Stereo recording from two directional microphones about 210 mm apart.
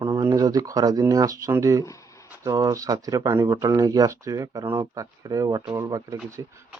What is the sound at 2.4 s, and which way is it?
Speech, 15° right (ahead or behind).